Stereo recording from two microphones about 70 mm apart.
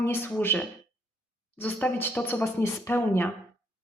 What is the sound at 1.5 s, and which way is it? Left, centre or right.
Speech, left.